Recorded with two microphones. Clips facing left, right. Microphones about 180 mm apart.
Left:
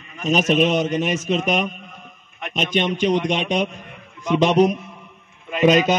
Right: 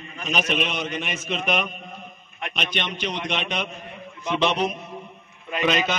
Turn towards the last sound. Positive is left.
turn(degrees=45)  # may be behind; listen again after turning